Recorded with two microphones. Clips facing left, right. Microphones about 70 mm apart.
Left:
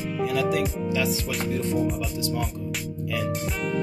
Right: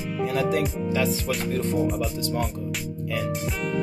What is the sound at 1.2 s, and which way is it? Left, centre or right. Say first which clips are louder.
Speech: right 1 dB; right.